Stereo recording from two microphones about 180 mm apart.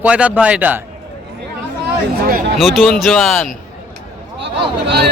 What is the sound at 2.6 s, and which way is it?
Speech, centre (ahead or behind).